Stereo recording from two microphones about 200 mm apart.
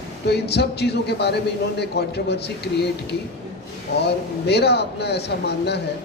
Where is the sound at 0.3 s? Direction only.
55° left (ahead or behind).